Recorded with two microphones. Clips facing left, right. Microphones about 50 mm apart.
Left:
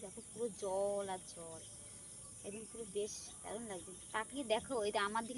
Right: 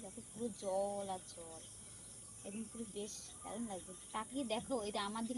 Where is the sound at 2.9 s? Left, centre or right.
Left.